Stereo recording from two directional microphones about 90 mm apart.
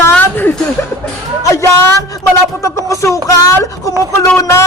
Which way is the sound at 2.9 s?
35° left (ahead or behind).